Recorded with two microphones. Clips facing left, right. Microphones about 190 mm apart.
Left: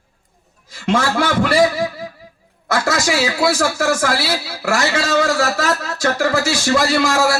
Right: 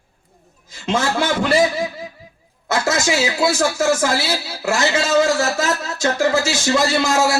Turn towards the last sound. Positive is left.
turn(degrees=-20)  # may be behind; listen again after turning